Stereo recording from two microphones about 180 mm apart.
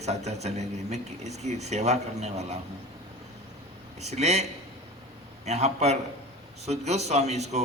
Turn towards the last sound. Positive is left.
turn(degrees=-40)  # may be behind; listen again after turning